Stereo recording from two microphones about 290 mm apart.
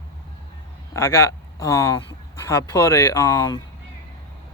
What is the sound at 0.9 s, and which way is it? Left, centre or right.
Speech, centre.